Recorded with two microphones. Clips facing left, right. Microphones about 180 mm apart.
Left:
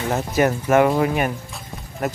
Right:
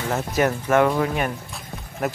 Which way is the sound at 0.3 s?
Centre (ahead or behind).